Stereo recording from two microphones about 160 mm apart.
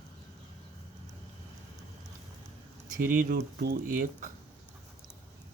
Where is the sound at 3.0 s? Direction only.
55° right (ahead or behind).